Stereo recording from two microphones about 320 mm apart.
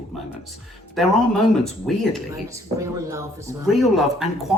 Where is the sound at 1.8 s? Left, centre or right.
Centre.